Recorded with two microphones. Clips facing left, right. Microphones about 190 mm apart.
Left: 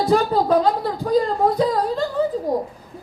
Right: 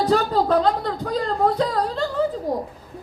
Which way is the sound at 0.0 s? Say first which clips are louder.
Left 1 dB; 10° left (ahead or behind).